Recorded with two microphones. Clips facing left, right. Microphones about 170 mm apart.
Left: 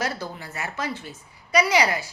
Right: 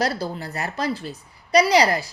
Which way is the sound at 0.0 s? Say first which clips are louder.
Right 5 dB; 35° right (ahead or behind).